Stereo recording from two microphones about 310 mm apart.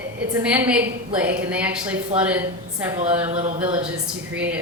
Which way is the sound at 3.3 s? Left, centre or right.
Right.